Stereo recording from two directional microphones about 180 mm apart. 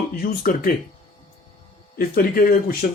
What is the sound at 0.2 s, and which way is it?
Speech, 55° left (ahead or behind).